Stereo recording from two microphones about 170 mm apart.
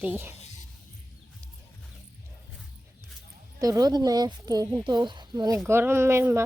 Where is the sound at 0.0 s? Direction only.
10° right (ahead or behind).